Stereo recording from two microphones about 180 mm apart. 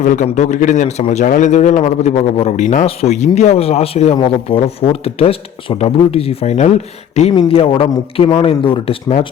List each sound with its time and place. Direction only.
0.0 s speech: 45° left (ahead or behind)